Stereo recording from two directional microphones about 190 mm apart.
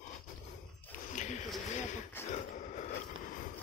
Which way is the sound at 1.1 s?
40° left (ahead or behind).